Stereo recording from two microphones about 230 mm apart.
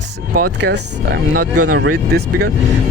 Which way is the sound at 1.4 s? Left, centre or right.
Right.